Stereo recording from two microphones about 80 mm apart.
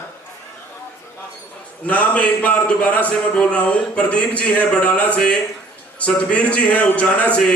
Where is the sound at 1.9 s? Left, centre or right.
Centre.